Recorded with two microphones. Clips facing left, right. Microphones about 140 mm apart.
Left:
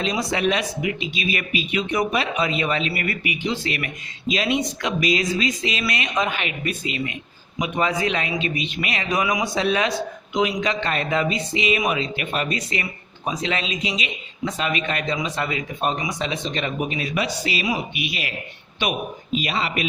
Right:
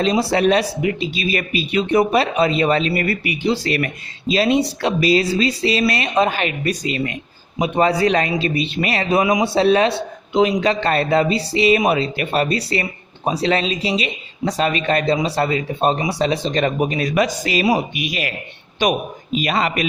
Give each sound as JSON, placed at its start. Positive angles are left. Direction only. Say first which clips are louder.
{"t": 0.0, "sound": "a man's voice", "louder": "right 6 dB", "side_deg": -35}